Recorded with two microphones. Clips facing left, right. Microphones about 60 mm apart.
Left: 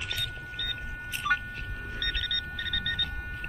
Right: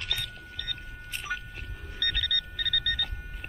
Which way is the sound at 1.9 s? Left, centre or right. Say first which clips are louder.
Right 3 dB; centre.